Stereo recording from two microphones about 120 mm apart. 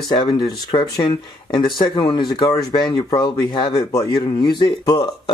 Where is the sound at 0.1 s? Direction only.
40° left (ahead or behind).